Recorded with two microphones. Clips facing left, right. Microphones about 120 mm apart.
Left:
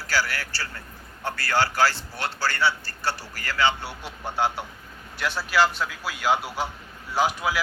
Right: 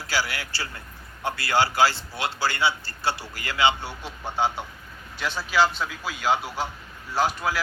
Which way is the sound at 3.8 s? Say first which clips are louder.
Even; 10° left (ahead or behind).